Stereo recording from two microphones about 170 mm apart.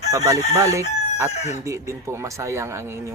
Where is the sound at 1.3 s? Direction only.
40° left (ahead or behind).